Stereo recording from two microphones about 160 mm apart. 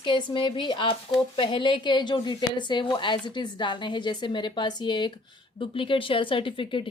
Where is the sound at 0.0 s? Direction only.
30° left (ahead or behind).